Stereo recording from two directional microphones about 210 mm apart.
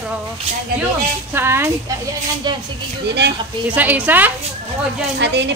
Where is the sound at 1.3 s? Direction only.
10° right (ahead or behind).